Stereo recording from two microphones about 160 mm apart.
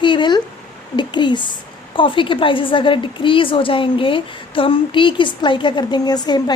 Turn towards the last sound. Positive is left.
turn(degrees=25)  # may be behind; listen again after turning